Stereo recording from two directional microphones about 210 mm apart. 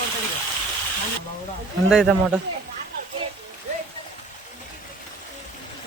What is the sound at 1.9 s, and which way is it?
Speech, 5° right (ahead or behind).